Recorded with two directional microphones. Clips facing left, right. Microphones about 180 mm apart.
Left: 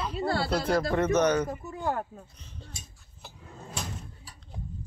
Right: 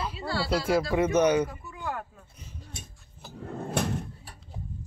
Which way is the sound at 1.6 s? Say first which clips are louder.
Left 4 dB; 40° left (ahead or behind).